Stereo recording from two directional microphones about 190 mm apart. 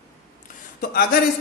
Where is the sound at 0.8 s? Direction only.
50° left (ahead or behind).